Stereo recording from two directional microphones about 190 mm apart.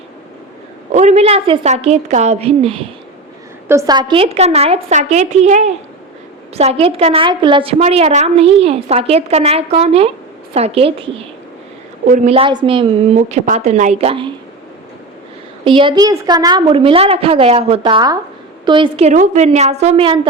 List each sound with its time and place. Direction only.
0.9 s a woman's voice: 35° right (ahead or behind)
3.7 s a woman's voice: 20° right (ahead or behind)
12.0 s a woman's voice: 40° right (ahead or behind)
15.6 s a woman's voice: 25° right (ahead or behind)